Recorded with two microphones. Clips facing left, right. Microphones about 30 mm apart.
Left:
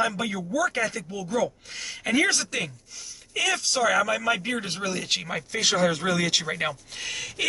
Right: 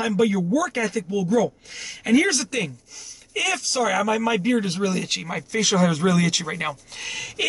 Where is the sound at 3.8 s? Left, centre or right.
Centre.